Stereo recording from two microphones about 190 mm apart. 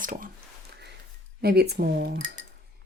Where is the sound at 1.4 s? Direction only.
55° right (ahead or behind).